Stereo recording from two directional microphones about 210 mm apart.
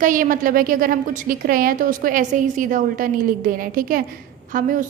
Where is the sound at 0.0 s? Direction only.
40° right (ahead or behind).